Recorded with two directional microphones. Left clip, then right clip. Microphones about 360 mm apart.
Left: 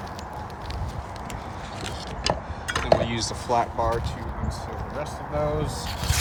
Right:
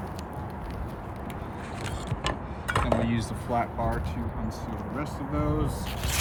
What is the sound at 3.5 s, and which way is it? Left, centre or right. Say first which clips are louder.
Speech: left 5 dB; centre.